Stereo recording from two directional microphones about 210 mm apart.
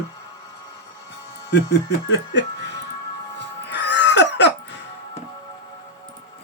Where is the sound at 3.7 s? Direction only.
55° left (ahead or behind).